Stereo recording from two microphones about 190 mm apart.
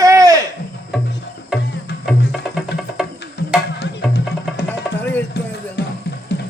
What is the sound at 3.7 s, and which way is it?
Music, 60° left (ahead or behind).